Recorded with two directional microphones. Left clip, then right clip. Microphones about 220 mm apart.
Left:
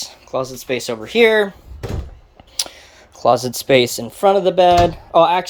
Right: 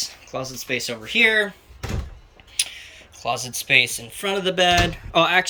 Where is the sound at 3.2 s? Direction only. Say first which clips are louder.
Left 11 dB; 60° left (ahead or behind).